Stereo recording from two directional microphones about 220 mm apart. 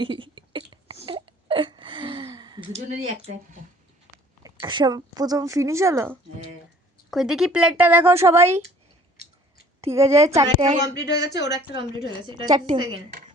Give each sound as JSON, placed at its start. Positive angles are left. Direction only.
{"t": 0.0, "sound": "a sound", "side_deg": -20}
{"t": 1.0, "sound": "wail", "side_deg": -25}
{"t": 2.7, "sound": "speech", "side_deg": -30}
{"t": 4.4, "sound": "a woman's voice", "side_deg": -20}
{"t": 7.1, "sound": "a woman's voice", "side_deg": 0}
{"t": 9.8, "sound": "a woman's voice", "side_deg": -10}
{"t": 10.9, "sound": "speech", "side_deg": 50}
{"t": 11.7, "sound": "a woman's voice", "side_deg": -20}